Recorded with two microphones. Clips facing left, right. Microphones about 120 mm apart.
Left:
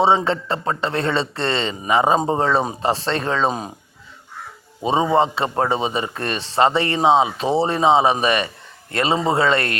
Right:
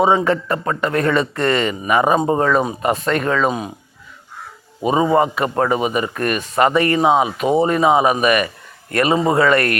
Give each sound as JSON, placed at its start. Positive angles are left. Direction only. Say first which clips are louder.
{"t": 0.3, "sound": "speech", "louder": "right 3 dB", "side_deg": 25}
{"t": 5.1, "sound": "speech", "louder": "right 2 dB", "side_deg": 25}